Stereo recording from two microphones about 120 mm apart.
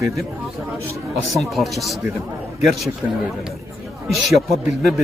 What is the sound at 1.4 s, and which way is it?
Speech, centre (ahead or behind).